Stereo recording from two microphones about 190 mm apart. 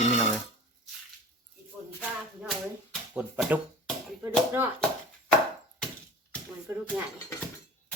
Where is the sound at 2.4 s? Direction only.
5° right (ahead or behind).